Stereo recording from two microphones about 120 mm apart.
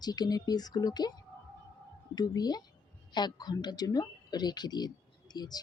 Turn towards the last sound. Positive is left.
turn(degrees=35)  # may be behind; listen again after turning